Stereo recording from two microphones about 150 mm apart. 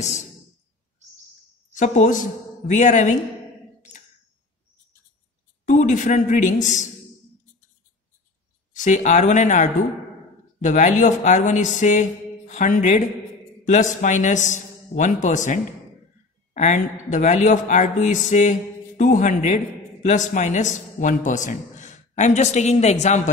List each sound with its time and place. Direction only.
1.7 s speech: 55° left (ahead or behind)
5.7 s speech: 55° left (ahead or behind)
8.7 s speech: 55° left (ahead or behind)